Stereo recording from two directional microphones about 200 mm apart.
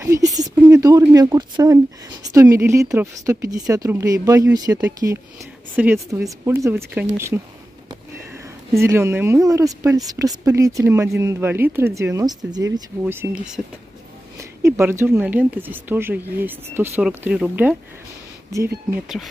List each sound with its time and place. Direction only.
0.0 s a sound: 15° right (ahead or behind)
0.6 s speech: 10° right (ahead or behind)
13.0 s speech: 10° right (ahead or behind)